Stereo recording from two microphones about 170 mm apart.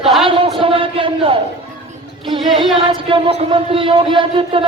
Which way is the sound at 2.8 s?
30° right (ahead or behind).